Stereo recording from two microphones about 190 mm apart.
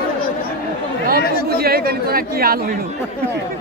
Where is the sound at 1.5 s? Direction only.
55° right (ahead or behind).